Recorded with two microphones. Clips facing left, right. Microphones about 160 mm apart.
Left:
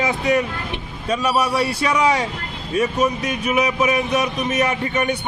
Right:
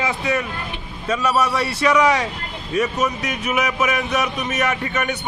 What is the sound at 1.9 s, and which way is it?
Speech, 30° left (ahead or behind).